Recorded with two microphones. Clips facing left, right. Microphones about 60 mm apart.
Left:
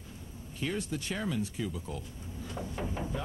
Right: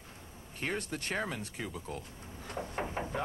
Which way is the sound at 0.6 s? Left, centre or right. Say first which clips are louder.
Left 2 dB; right.